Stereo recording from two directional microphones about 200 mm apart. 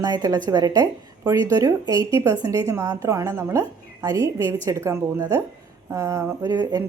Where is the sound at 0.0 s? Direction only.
20° right (ahead or behind).